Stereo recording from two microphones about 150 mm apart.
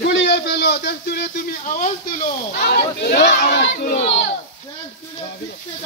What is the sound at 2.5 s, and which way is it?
Speech, 80° left.